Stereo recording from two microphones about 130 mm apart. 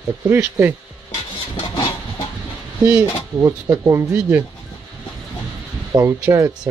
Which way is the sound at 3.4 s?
25° right (ahead or behind).